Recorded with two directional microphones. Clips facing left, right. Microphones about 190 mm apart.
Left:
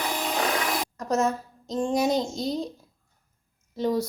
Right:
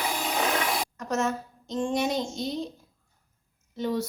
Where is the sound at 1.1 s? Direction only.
35° left (ahead or behind).